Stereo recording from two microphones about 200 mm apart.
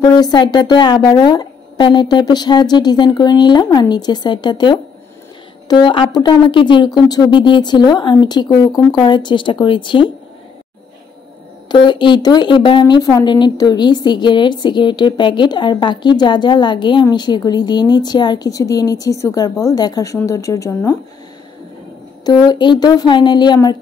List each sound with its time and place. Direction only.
0.0 s speech: 20° left (ahead or behind)
11.7 s speech: 25° left (ahead or behind)
22.2 s speech: 20° left (ahead or behind)